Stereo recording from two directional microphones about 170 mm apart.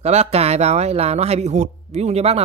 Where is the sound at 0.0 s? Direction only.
40° right (ahead or behind).